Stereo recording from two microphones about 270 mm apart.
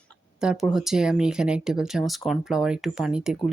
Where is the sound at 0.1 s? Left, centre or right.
Centre.